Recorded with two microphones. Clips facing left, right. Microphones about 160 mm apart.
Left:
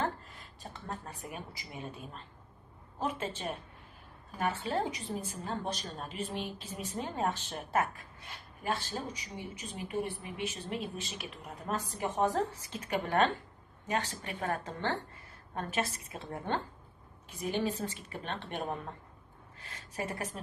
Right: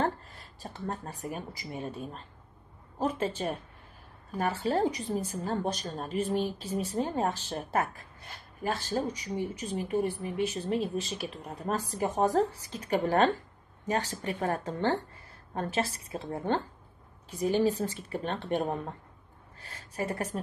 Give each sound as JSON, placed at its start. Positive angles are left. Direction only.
{"t": 0.0, "sound": "a woman's voice", "side_deg": -35}
{"t": 3.0, "sound": "a woman's voice", "side_deg": -40}